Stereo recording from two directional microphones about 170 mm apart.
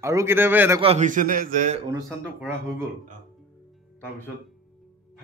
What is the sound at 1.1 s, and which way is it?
Speech, 55° right (ahead or behind).